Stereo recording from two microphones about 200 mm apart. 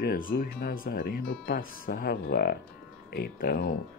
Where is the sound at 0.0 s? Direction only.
45° left (ahead or behind).